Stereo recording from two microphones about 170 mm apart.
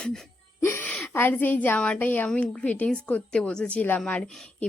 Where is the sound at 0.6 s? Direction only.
15° left (ahead or behind).